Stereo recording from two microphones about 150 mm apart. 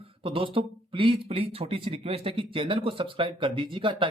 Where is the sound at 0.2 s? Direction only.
35° right (ahead or behind).